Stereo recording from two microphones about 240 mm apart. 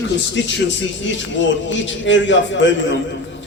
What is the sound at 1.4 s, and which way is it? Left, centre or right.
A man's voice, left.